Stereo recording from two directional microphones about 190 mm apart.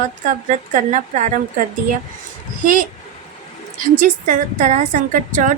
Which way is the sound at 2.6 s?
40° right (ahead or behind).